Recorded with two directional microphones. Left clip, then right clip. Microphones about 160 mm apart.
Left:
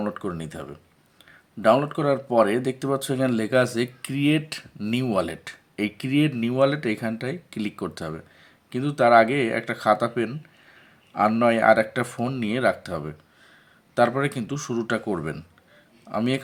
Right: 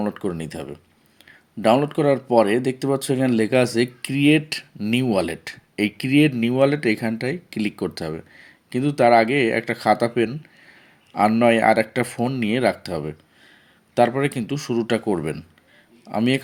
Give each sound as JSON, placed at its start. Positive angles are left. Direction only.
{"t": 0.0, "sound": "speech", "side_deg": -15}